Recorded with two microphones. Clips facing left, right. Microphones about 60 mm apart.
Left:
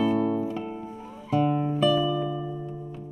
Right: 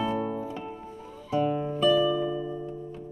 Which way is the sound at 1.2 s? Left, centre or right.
Centre.